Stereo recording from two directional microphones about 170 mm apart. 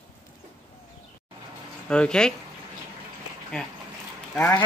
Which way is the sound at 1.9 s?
5° left (ahead or behind).